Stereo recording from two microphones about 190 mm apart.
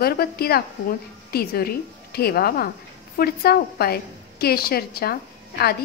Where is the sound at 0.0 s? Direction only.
55° left (ahead or behind).